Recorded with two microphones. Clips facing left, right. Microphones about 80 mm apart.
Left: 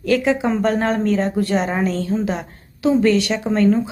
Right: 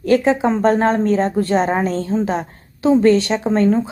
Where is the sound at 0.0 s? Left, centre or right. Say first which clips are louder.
Right 3 dB; right.